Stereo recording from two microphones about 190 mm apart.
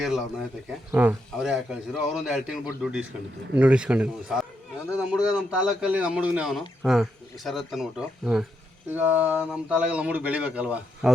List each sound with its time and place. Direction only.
0.0 s speech: centre (ahead or behind)